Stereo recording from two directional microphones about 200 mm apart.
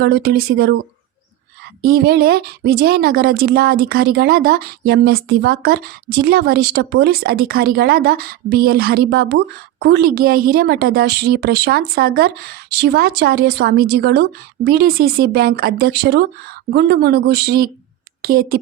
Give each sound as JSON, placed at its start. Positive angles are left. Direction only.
{"t": 0.0, "sound": "a woman's voice", "side_deg": -50}
{"t": 1.8, "sound": "a woman's voice", "side_deg": -50}